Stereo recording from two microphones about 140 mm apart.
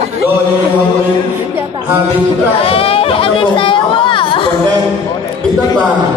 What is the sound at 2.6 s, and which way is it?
Speech, 45° left (ahead or behind).